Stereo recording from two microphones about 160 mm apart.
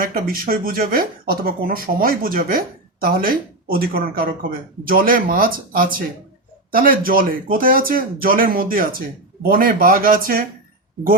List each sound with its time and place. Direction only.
0.0 s speech: 65° right (ahead or behind)